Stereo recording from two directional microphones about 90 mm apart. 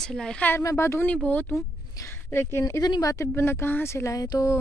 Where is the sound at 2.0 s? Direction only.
25° left (ahead or behind).